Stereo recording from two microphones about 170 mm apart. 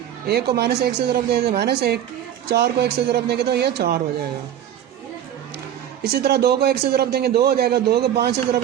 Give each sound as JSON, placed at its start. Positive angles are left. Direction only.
{"t": 0.3, "sound": "a man's voice", "side_deg": -70}
{"t": 6.0, "sound": "a man's voice", "side_deg": -70}